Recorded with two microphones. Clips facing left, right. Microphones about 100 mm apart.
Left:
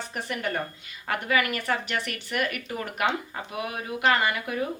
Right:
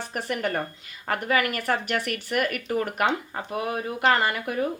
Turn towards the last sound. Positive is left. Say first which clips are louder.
# right 1 dB
turn(degrees=-40)  # may be behind; listen again after turning